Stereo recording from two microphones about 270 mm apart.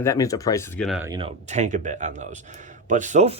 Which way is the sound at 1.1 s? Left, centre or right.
Right.